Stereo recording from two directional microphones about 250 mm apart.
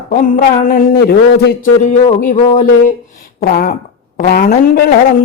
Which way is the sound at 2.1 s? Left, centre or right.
Left.